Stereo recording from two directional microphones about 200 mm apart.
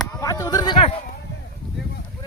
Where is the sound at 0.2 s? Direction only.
15° left (ahead or behind).